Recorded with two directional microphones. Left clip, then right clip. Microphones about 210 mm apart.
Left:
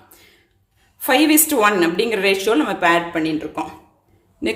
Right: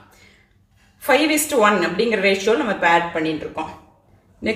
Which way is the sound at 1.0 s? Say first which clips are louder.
Left 2 dB; 50° left (ahead or behind).